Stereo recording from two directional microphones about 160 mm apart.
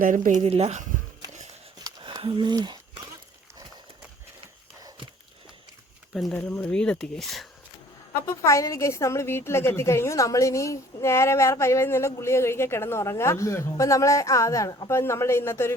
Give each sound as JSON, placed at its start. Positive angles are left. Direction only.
{"t": 0.0, "sound": "speech", "side_deg": -55}
{"t": 1.8, "sound": "a sound", "side_deg": -30}
{"t": 6.1, "sound": "speech", "side_deg": 0}
{"t": 6.4, "sound": "speech", "side_deg": 10}
{"t": 8.1, "sound": "a woman's voice", "side_deg": 20}